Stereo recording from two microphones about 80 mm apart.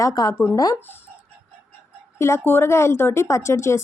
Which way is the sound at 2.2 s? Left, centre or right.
Left.